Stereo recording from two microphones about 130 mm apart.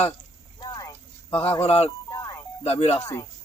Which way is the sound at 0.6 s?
30° left (ahead or behind).